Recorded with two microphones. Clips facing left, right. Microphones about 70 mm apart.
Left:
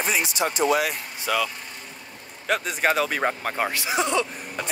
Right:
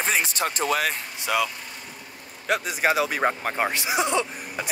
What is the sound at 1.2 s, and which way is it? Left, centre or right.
Speech, centre.